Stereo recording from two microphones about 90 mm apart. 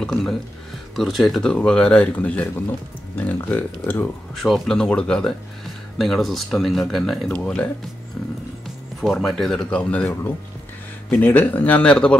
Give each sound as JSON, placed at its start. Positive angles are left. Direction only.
{"t": 0.0, "sound": "speech", "side_deg": 5}
{"t": 4.4, "sound": "speech", "side_deg": 5}
{"t": 11.1, "sound": "speech", "side_deg": 20}